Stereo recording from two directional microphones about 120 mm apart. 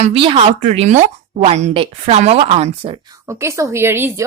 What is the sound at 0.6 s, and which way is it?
Speech, 70° right (ahead or behind).